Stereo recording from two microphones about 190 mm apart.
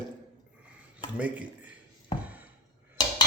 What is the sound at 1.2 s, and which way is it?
Speech, 5° right (ahead or behind).